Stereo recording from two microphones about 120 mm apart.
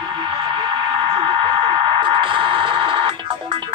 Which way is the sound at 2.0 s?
45° right (ahead or behind).